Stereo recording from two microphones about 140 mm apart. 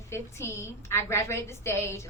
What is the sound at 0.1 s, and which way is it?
A woman's voice, 20° left (ahead or behind).